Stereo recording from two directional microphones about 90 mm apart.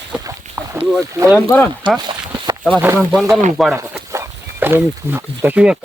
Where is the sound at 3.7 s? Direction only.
30° right (ahead or behind).